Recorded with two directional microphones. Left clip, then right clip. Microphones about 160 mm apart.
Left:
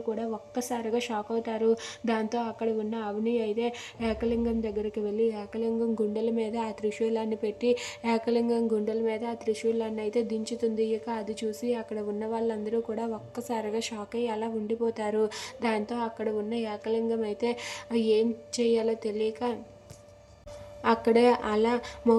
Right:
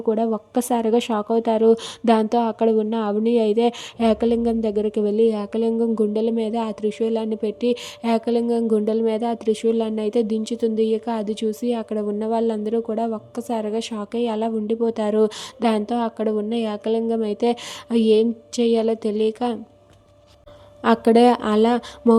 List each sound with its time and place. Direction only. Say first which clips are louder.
0.1 s speech: right 12 dB; 55° right (ahead or behind)
20.8 s speech: right 7 dB; 45° right (ahead or behind)